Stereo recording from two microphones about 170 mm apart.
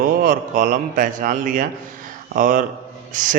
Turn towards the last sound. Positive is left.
turn(degrees=-50)  # may be behind; listen again after turning